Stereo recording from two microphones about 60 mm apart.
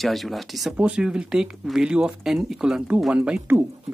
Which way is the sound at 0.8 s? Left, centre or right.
Centre.